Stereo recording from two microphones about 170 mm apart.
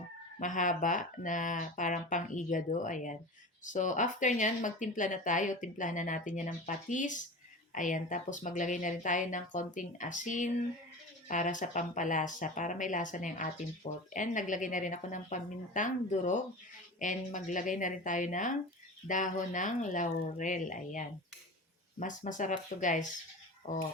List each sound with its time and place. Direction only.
0.3 s speech: 50° left (ahead or behind)